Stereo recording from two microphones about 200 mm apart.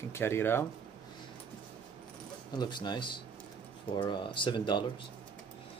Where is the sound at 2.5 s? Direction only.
20° left (ahead or behind).